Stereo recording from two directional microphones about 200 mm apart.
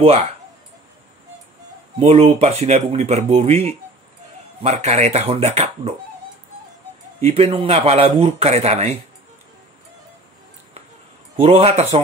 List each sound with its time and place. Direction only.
0.0 s speech: 30° right (ahead or behind)
2.0 s speech: 30° right (ahead or behind)
7.2 s speech: 30° right (ahead or behind)
11.3 s speech: 30° right (ahead or behind)